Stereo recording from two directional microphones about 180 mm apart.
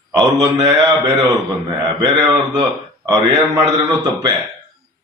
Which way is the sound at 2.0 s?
15° right (ahead or behind).